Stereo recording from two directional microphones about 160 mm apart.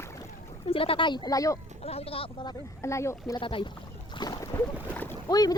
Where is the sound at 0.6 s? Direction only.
35° left (ahead or behind).